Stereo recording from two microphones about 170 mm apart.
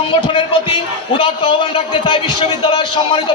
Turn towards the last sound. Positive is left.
turn(degrees=30)  # may be behind; listen again after turning